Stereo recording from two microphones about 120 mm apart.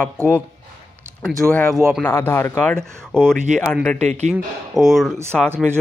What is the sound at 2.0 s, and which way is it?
Speech, 20° left (ahead or behind).